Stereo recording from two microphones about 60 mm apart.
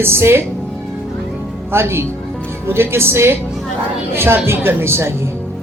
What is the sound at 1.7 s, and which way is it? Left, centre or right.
Speech, right.